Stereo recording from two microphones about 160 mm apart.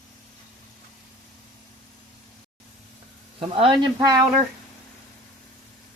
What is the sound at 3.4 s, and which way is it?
Speech, 35° right (ahead or behind).